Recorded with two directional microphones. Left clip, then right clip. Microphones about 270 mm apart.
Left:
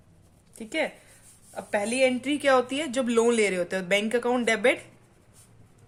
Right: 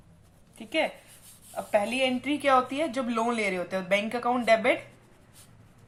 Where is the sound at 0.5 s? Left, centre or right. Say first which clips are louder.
Right 1 dB; left.